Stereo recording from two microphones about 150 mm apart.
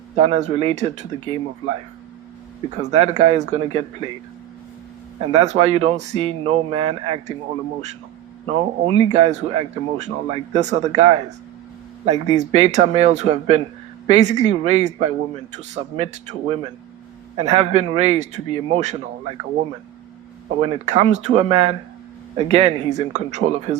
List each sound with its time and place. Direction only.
0.2 s speech: 45° right (ahead or behind)
2.6 s speech: 50° right (ahead or behind)
5.3 s speech: 45° right (ahead or behind)
8.4 s speech: 40° right (ahead or behind)
20.6 s speech: 45° right (ahead or behind)